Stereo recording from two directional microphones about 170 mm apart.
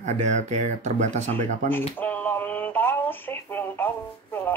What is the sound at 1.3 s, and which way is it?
Speech, 10° left (ahead or behind).